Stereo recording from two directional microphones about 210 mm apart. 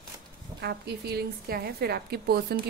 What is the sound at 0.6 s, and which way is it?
A woman's voice, 50° right (ahead or behind).